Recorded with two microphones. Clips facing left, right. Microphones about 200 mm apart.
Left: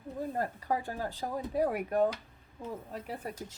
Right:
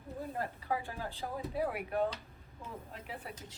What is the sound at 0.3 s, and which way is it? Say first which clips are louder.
A woman's voice: left 3 dB; 45° left (ahead or behind).